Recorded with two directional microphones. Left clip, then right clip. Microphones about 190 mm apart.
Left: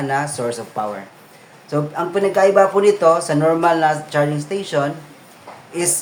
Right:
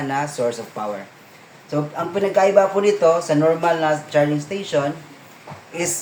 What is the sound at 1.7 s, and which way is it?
A man's voice, 35° left (ahead or behind).